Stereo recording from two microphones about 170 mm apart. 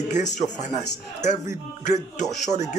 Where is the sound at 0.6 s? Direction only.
45° left (ahead or behind).